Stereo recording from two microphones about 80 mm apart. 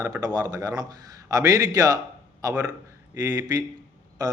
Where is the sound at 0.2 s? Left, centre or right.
Right.